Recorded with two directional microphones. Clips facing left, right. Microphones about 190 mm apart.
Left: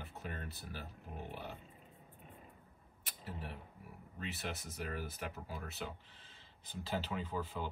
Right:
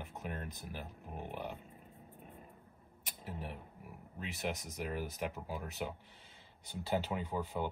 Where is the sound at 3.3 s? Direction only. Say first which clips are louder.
Right 2 dB; 15° right (ahead or behind).